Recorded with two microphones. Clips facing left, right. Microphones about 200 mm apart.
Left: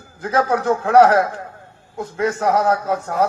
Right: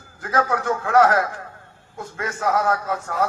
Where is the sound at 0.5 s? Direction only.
25° left (ahead or behind).